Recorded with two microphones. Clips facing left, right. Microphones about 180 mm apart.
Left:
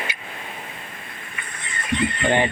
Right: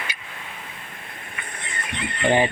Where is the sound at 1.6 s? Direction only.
60° right (ahead or behind).